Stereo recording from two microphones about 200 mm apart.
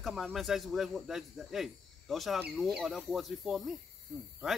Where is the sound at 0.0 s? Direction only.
Centre (ahead or behind).